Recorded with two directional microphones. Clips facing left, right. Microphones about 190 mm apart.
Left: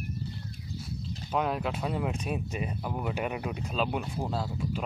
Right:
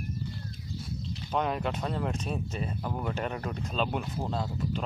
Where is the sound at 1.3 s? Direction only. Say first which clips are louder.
Even; 5° left (ahead or behind).